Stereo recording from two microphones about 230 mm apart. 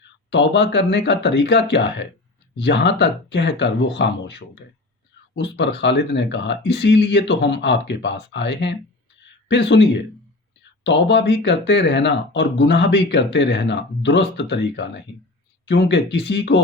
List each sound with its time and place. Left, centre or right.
0.3 s speech: left